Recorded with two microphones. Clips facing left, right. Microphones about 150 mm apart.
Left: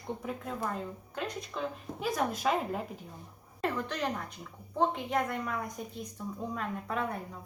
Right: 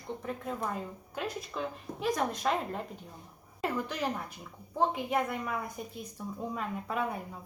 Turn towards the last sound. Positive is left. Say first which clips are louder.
# right 1 dB
turn(degrees=-5)  # may be behind; listen again after turning